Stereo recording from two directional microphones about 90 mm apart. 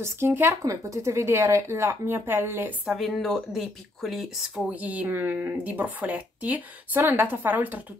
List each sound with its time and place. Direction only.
0.0 s speech: 25° right (ahead or behind)
2.8 s speech: 5° right (ahead or behind)
4.7 s speech: 15° right (ahead or behind)